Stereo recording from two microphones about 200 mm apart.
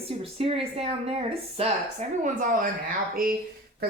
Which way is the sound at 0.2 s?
30° right (ahead or behind).